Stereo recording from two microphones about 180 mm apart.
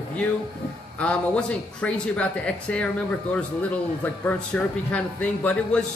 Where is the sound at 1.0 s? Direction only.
5° left (ahead or behind).